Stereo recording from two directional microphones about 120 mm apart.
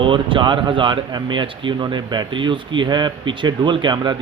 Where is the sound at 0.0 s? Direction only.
45° right (ahead or behind).